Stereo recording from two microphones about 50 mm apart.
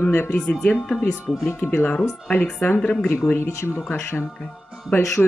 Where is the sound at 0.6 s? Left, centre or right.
Centre.